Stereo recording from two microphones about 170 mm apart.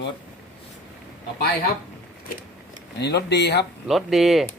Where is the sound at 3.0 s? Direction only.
80° left.